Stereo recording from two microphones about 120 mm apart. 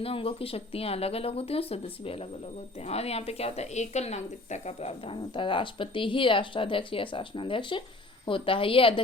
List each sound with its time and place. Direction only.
0.0 s a woman's voice: 50° left (ahead or behind)